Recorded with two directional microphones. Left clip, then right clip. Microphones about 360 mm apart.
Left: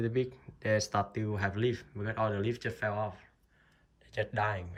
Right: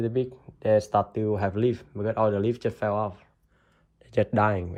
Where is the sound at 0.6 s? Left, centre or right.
Centre.